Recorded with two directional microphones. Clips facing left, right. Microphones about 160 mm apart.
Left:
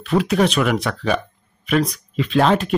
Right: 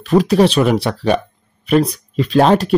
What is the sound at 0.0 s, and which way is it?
Speech, 40° right (ahead or behind).